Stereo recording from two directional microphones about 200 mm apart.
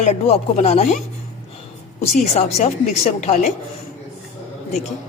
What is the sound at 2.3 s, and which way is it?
A woman's voice, 35° left (ahead or behind).